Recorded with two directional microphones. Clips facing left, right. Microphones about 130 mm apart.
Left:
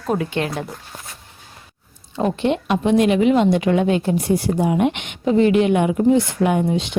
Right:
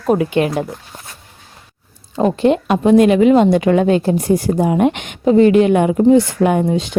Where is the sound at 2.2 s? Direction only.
40° right (ahead or behind).